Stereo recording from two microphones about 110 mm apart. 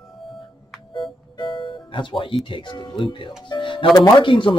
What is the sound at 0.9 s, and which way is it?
Music, 45° left (ahead or behind).